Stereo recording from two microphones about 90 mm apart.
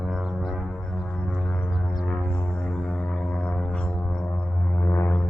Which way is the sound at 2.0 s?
20° left (ahead or behind).